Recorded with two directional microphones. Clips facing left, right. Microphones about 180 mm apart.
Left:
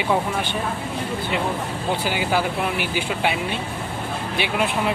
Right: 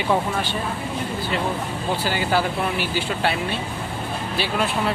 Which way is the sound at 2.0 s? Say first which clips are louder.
Right 1 dB; 15° left (ahead or behind).